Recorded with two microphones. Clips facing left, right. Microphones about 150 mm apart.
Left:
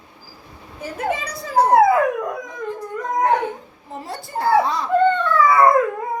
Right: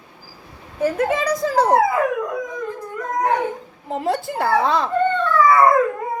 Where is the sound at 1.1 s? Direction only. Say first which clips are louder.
Right 5 dB; 90° right.